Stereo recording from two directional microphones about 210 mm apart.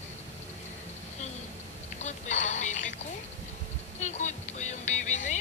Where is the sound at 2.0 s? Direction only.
35° left (ahead or behind).